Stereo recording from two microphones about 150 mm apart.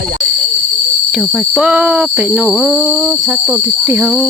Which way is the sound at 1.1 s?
Centre (ahead or behind).